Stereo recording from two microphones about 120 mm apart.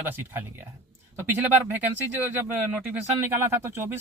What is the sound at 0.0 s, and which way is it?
Speech, 15° right (ahead or behind).